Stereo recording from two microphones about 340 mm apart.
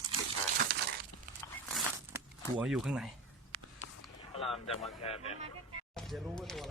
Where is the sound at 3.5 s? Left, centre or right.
Right.